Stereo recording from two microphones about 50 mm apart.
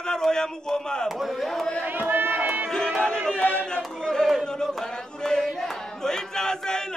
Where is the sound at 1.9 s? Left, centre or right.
Right.